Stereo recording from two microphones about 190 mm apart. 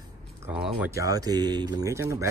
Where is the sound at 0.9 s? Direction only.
20° right (ahead or behind).